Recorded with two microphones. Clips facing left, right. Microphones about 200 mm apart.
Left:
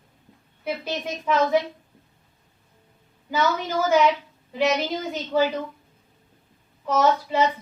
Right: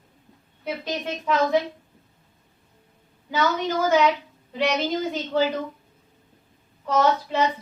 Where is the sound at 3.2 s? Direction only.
5° left (ahead or behind).